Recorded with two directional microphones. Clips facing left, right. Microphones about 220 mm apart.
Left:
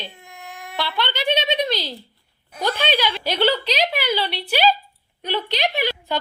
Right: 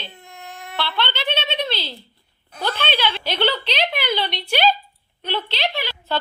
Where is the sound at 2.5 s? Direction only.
10° left (ahead or behind).